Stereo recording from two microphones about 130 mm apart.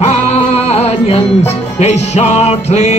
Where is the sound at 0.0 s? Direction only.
55° left (ahead or behind).